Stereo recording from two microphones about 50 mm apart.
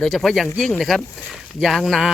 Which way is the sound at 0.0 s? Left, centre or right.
Centre.